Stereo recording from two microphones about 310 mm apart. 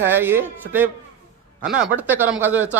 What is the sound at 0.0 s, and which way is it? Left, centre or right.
A man's voice, centre.